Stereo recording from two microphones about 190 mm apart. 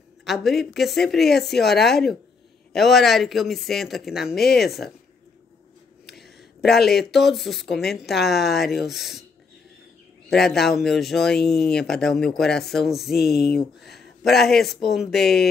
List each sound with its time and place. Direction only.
0.2 s speech: centre (ahead or behind)
6.8 s speech: 55° left (ahead or behind)
7.1 s speech: centre (ahead or behind)
10.3 s speech: centre (ahead or behind)
13.2 s speech: 55° left (ahead or behind)
13.9 s speech: centre (ahead or behind)
15.2 s speech: 55° left (ahead or behind)